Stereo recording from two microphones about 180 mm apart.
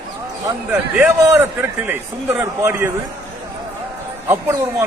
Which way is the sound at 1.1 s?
15° right (ahead or behind).